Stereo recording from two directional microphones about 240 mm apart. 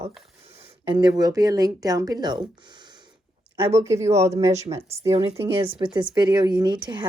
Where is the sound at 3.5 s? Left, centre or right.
Right.